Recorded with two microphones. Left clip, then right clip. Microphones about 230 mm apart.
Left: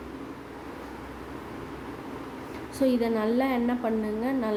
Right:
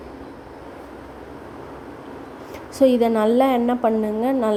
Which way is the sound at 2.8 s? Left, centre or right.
Right.